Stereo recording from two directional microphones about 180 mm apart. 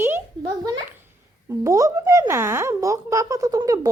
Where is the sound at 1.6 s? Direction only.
15° right (ahead or behind).